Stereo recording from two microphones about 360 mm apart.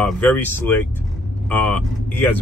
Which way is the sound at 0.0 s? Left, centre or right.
Centre.